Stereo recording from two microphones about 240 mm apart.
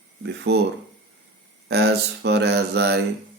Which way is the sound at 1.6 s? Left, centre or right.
Right.